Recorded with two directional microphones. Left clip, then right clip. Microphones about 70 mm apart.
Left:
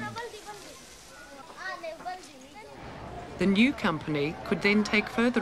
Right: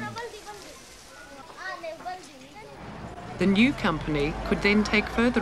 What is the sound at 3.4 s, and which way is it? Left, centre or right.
Speech, centre.